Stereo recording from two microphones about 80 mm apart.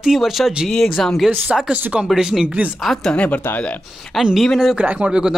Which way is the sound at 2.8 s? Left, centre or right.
Centre.